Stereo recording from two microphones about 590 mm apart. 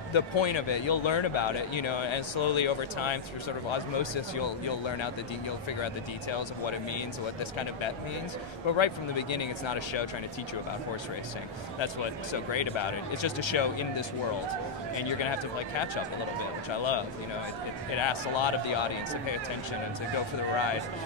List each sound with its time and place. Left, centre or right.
0.1 s speech: left
8.7 s speech: left
11.8 s speech: left
18.0 s speech: left